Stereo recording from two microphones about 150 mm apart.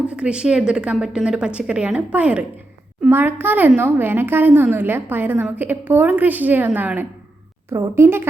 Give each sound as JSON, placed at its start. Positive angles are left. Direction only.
{"t": 0.1, "sound": "speech", "side_deg": -5}